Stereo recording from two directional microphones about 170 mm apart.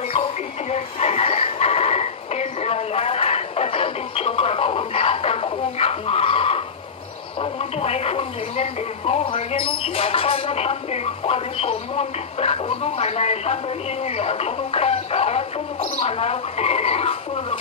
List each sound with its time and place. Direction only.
0.1 s a sound: 35° left (ahead or behind)
7.3 s speech: 35° left (ahead or behind)
14.0 s music: 35° left (ahead or behind)
16.0 s speech: 35° left (ahead or behind)